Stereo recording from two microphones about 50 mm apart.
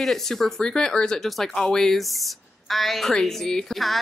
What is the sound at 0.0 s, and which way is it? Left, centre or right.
A woman's voice, centre.